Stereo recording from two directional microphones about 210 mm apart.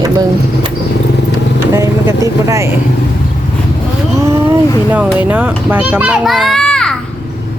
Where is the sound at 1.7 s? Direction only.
15° right (ahead or behind).